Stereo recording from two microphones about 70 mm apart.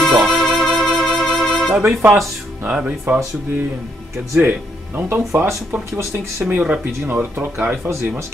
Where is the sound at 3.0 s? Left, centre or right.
Right.